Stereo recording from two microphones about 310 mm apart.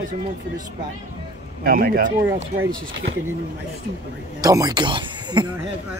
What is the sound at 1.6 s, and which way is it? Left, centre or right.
Speech, right.